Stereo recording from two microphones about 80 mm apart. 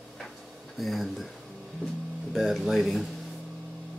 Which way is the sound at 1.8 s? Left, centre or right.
Centre.